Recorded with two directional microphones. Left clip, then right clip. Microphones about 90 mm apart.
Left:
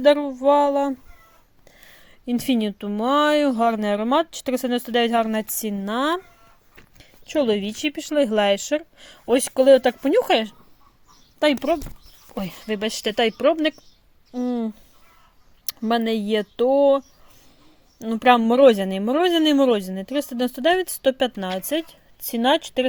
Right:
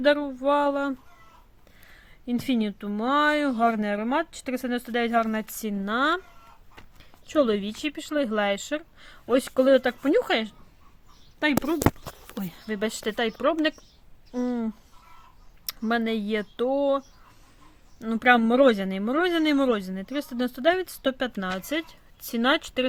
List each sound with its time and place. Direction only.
0.0 s speech: 30° left (ahead or behind)
2.0 s speech: 40° left (ahead or behind)
7.3 s speech: 20° left (ahead or behind)
7.9 s speech: 40° left (ahead or behind)
11.4 s speech: 55° left (ahead or behind)
12.9 s a woman's voice: 25° left (ahead or behind)
15.6 s speech: 30° left (ahead or behind)
18.1 s speech: 25° left (ahead or behind)
21.5 s a woman's voice: 15° left (ahead or behind)